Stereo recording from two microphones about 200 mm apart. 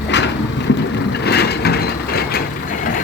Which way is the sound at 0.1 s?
60° left (ahead or behind).